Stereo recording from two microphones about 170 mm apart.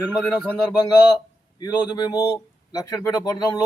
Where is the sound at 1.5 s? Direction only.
25° left (ahead or behind).